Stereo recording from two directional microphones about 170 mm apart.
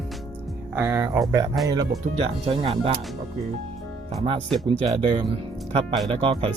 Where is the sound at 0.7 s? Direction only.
15° right (ahead or behind).